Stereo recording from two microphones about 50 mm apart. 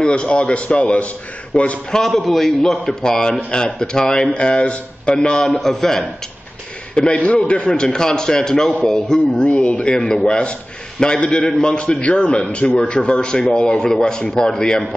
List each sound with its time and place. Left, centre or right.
0.0 s a man's voice: centre
2.2 s a man's voice: centre
3.0 s a man's voice: centre
5.4 s a man's voice: centre
7.2 s a man's voice: left; by 9.2 s centre
9.4 s a man's voice: left